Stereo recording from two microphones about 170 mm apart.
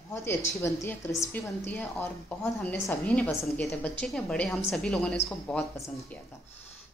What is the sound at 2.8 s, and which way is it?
A woman's voice, 10° left (ahead or behind).